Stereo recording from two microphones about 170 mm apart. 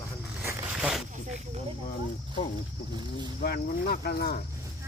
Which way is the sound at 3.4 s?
65° left (ahead or behind).